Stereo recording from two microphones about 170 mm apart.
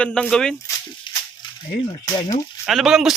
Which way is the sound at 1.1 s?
25° left (ahead or behind).